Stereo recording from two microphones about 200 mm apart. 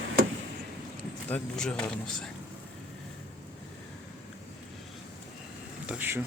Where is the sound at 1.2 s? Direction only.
5° left (ahead or behind).